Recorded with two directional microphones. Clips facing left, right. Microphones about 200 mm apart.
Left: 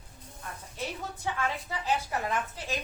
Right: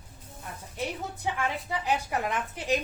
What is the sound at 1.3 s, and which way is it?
A woman's voice, 15° right (ahead or behind).